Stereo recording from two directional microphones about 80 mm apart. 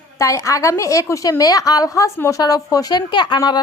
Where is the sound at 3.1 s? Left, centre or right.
Left.